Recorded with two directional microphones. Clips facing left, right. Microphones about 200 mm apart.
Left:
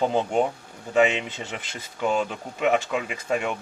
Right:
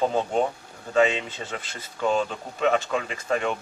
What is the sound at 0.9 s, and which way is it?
Speech, 15° left (ahead or behind).